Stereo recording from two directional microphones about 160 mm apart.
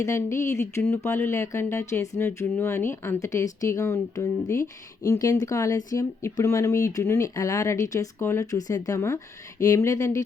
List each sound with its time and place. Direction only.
0.0 s speech: 15° left (ahead or behind)